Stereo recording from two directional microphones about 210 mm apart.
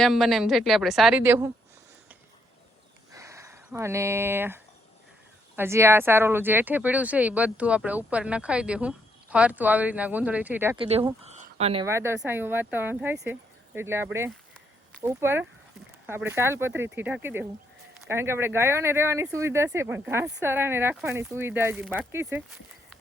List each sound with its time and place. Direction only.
0.0 s speech: centre (ahead or behind)
3.1 s a sound: 15° right (ahead or behind)
5.5 s speech: 10° right (ahead or behind)
10.8 s speech: 30° right (ahead or behind)
11.2 s a sound: 30° right (ahead or behind)
11.9 s speech: 10° right (ahead or behind)